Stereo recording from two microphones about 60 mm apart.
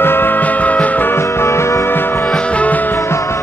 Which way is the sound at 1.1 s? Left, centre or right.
Left.